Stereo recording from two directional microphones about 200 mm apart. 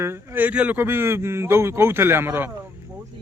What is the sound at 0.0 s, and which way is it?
A man's voice, 10° right (ahead or behind).